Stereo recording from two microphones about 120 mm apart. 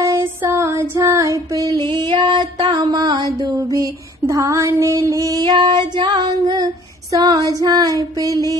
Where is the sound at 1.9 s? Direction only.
40° right (ahead or behind).